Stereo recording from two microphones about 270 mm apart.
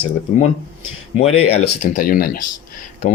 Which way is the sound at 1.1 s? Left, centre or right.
Left.